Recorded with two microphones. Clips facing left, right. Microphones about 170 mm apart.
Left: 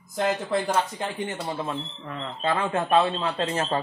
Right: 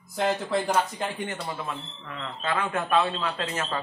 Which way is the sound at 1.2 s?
25° left (ahead or behind).